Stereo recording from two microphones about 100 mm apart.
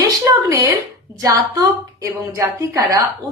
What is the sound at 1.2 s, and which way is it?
A woman's voice, 35° right (ahead or behind).